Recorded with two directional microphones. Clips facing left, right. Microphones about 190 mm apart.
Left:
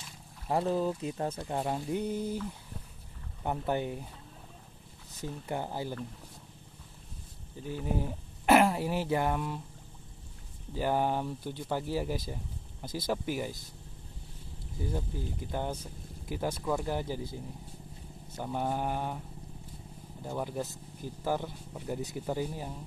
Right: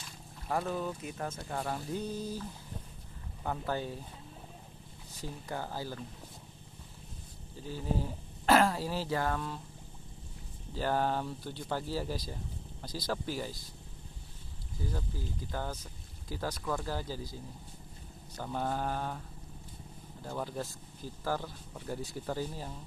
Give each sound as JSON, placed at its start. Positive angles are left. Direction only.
{"t": 0.5, "sound": "speech", "side_deg": 30}
{"t": 2.0, "sound": "speech", "side_deg": 55}
{"t": 3.4, "sound": "speech", "side_deg": 20}
{"t": 5.2, "sound": "speech", "side_deg": 20}
{"t": 7.6, "sound": "speech", "side_deg": 20}
{"t": 10.7, "sound": "speech", "side_deg": 15}
{"t": 14.9, "sound": "speech", "side_deg": 20}
{"t": 20.2, "sound": "speech", "side_deg": 15}